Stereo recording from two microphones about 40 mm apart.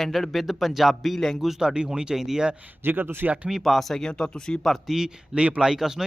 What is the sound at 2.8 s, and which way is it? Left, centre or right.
Speech, right.